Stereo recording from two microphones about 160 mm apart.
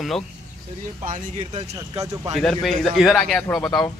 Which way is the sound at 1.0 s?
45° right (ahead or behind).